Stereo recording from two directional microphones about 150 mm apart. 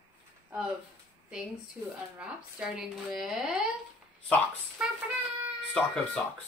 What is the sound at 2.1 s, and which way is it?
A woman's voice, 5° right (ahead or behind).